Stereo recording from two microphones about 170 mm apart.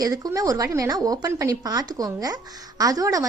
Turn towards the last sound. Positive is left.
turn(degrees=-20)  # may be behind; listen again after turning